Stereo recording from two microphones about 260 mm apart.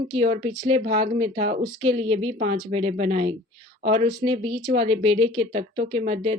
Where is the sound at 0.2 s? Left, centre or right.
Right.